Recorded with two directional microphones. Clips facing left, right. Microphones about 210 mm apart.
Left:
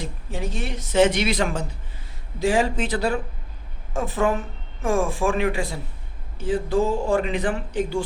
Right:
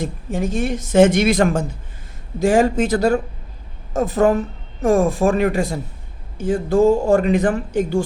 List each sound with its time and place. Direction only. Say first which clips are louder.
0.0 s speech: right 8 dB; 50° right (ahead or behind)